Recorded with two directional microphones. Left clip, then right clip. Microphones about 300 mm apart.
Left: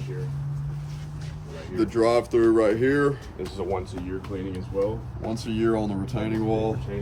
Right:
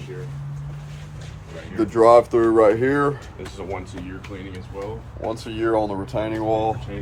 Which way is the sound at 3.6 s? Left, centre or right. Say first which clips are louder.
Left 2 dB; left.